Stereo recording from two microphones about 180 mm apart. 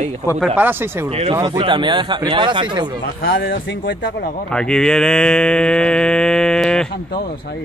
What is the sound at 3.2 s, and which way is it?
Speech, 55° left (ahead or behind).